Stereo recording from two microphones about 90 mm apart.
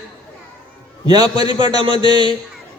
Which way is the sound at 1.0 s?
50° right (ahead or behind).